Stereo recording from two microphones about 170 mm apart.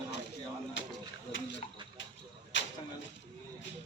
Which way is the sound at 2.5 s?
90° left.